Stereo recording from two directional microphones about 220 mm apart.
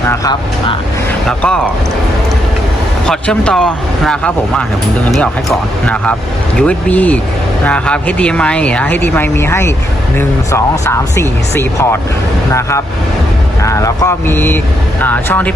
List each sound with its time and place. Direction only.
0.1 s speech: 20° left (ahead or behind)
1.3 s speech: 5° left (ahead or behind)
3.1 s speech: 5° left (ahead or behind)
13.6 s speech: 15° left (ahead or behind)